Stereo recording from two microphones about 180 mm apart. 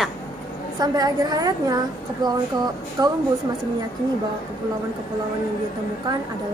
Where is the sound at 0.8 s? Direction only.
20° right (ahead or behind).